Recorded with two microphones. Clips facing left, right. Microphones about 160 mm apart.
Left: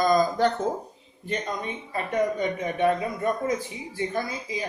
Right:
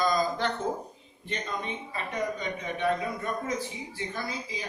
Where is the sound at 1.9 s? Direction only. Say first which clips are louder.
Left 8 dB; 50° left (ahead or behind).